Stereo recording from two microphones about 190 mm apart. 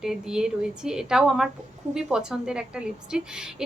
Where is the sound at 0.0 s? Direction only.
Centre (ahead or behind).